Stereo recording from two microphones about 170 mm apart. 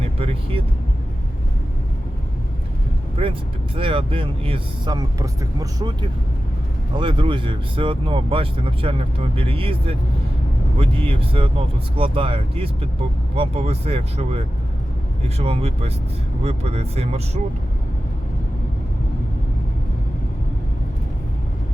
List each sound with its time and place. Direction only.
0.0 s speech: 35° right (ahead or behind)
3.8 s speech: 30° right (ahead or behind)